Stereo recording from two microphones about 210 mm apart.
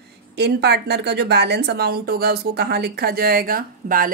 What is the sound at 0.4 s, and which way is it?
Speech, 55° right (ahead or behind).